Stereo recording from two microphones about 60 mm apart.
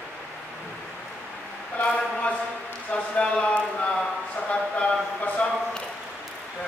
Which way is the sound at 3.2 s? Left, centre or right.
Centre.